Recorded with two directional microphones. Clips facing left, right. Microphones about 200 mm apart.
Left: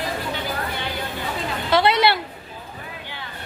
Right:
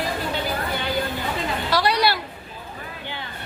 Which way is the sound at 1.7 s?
25° left (ahead or behind).